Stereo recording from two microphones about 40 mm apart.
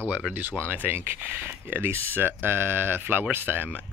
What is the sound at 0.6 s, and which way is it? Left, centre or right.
Speech, right.